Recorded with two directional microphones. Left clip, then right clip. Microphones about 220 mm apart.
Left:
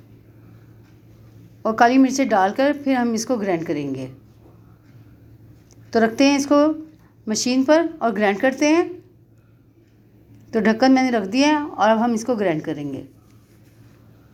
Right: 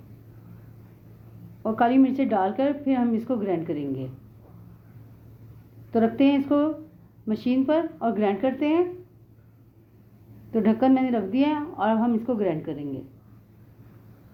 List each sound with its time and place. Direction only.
1.6 s a woman's voice: 35° left (ahead or behind)
5.9 s a woman's voice: 35° left (ahead or behind)
10.5 s a woman's voice: 30° left (ahead or behind)